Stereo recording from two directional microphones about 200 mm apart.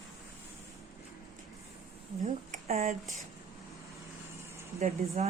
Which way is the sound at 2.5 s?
35° right (ahead or behind).